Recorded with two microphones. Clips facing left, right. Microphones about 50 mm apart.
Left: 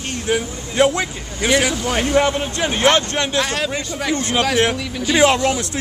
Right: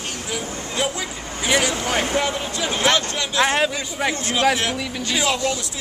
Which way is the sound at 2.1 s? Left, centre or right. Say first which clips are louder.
Left 5 dB; left.